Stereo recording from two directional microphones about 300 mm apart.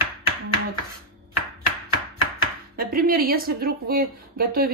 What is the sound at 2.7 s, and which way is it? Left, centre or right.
A woman's voice, right.